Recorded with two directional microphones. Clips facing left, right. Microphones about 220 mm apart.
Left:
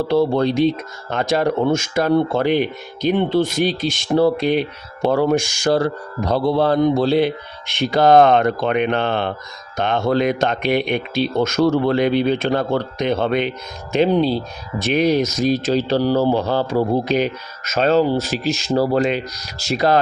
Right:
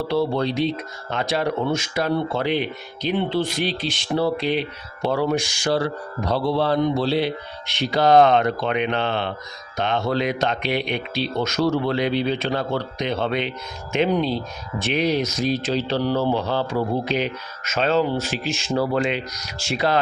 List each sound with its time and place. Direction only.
0.1 s speech: 50° left (ahead or behind)
13.9 s speech: 35° left (ahead or behind)